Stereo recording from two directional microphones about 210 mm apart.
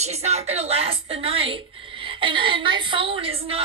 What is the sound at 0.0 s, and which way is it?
A woman's voice, 30° right (ahead or behind).